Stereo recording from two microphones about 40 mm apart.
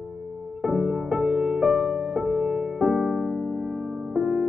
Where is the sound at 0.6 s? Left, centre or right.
Centre.